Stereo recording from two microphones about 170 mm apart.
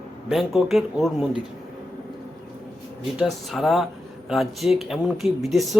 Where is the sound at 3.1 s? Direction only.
Centre (ahead or behind).